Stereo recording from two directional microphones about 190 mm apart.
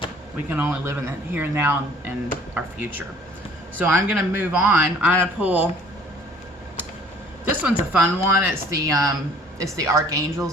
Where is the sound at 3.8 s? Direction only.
5° right (ahead or behind).